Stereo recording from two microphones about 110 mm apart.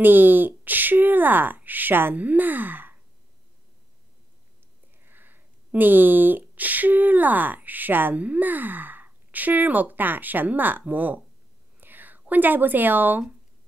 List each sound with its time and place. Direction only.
0.0 s speech: 20° right (ahead or behind)
5.0 s speech: 20° right (ahead or behind)